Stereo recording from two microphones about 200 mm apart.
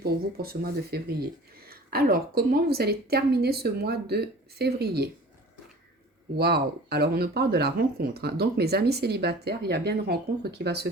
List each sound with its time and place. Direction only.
0.0 s speech: 50° right (ahead or behind)
6.3 s speech: 55° right (ahead or behind)